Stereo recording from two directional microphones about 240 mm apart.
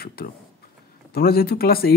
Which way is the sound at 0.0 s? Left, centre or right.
Left.